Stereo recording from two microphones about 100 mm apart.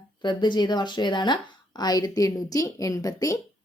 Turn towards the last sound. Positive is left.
turn(degrees=35)  # may be behind; listen again after turning